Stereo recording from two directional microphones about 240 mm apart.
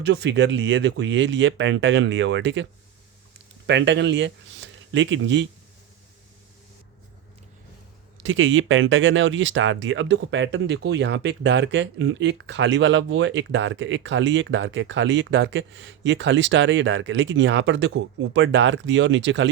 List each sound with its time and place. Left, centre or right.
0.0 s speech: right
3.7 s speech: right
8.2 s speech: right